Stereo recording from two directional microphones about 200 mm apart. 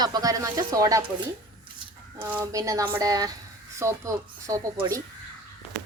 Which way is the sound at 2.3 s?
10° right (ahead or behind).